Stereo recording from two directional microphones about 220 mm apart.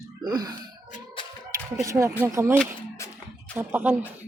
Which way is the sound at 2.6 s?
10° left (ahead or behind).